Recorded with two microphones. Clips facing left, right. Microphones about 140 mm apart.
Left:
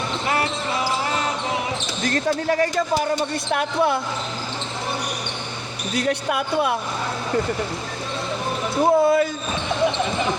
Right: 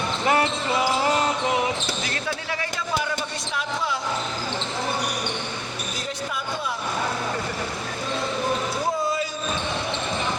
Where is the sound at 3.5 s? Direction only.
60° left (ahead or behind).